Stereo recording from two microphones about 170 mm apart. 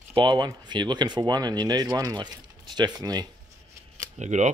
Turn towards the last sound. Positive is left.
turn(degrees=-45)  # may be behind; listen again after turning